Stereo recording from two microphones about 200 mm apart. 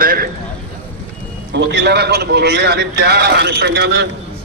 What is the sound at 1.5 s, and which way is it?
A man's voice, 60° right (ahead or behind).